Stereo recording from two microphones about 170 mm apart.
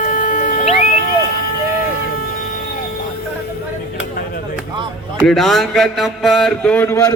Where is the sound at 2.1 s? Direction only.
55° left (ahead or behind).